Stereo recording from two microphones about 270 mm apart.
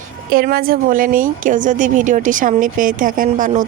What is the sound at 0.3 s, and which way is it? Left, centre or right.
A woman's voice, right.